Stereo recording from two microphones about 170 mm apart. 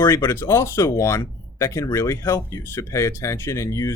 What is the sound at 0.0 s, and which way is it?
Speech, 15° left (ahead or behind).